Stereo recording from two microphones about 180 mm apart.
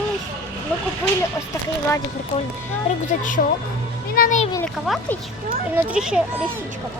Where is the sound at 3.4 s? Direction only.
50° left (ahead or behind).